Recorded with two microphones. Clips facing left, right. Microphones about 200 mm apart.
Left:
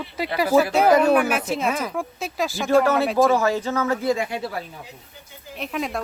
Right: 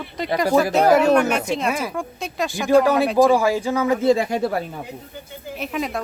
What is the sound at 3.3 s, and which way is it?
Speech, 10° right (ahead or behind).